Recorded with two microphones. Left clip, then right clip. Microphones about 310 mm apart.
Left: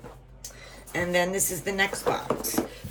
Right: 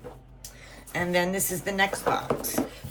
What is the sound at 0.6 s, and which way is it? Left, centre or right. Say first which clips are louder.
A woman's voice: even; centre.